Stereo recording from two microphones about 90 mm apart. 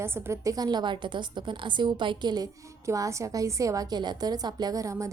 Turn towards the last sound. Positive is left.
turn(degrees=-35)  # may be behind; listen again after turning